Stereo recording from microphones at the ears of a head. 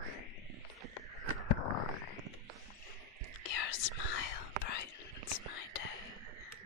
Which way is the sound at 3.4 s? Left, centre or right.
Left.